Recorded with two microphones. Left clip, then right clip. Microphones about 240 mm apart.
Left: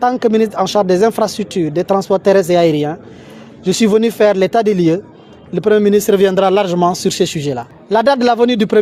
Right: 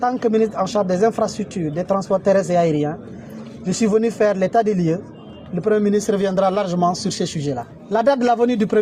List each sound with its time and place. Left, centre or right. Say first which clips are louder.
0.0 s speech: left 5 dB; left
2.6 s speech: left 6 dB; left
3.7 s speech: left 6 dB; left